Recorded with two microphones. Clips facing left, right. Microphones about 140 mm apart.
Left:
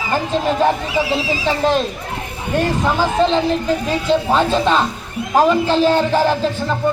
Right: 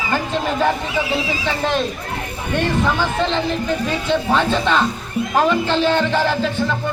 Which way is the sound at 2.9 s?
35° left (ahead or behind).